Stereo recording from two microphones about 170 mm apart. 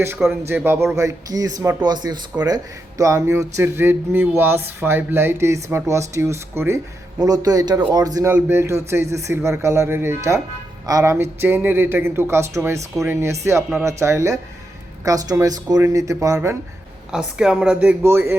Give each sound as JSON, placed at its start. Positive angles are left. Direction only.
{"t": 0.0, "sound": "speech", "side_deg": -10}
{"t": 17.1, "sound": "speech", "side_deg": -5}